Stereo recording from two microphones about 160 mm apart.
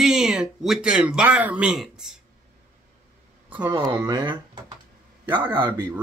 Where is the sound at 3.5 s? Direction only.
10° right (ahead or behind).